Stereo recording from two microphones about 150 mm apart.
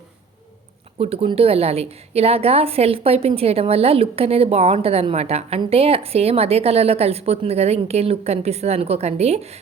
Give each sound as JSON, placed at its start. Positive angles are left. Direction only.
{"t": 0.9, "sound": "a woman's voice", "side_deg": -40}